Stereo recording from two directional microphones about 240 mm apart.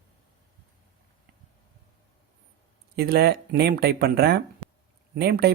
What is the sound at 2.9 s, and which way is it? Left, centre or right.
Speech, right.